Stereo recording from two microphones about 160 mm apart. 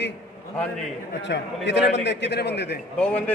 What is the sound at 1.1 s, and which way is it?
A man's voice, 90° left.